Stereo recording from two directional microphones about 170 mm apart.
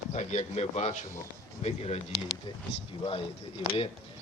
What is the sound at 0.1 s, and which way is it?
Speech, 40° left (ahead or behind).